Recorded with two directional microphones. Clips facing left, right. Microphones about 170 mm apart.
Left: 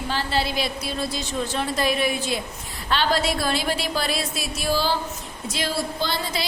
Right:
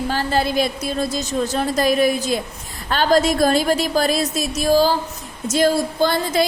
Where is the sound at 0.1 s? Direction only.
45° right (ahead or behind).